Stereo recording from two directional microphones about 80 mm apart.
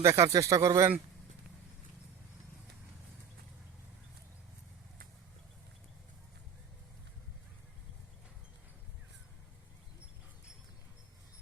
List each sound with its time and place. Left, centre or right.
0.0 s speech: right